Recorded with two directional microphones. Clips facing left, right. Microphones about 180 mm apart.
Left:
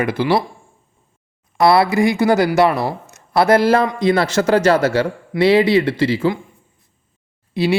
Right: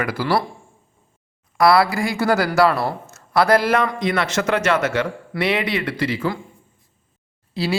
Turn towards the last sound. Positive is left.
turn(degrees=20)  # may be behind; listen again after turning